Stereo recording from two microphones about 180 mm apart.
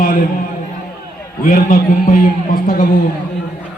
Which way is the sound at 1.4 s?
50° left (ahead or behind).